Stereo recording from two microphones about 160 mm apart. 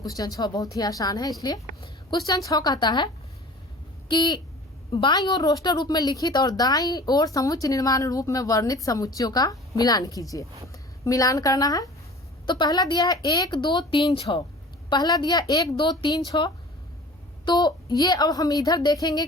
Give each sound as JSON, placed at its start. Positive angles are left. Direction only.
{"t": 0.0, "sound": "speech", "side_deg": 20}
{"t": 4.1, "sound": "speech", "side_deg": 30}